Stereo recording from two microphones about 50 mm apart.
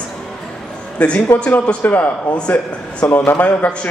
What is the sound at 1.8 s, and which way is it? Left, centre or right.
A man's voice, left.